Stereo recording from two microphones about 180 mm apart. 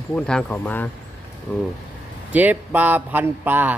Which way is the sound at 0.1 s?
5° left (ahead or behind).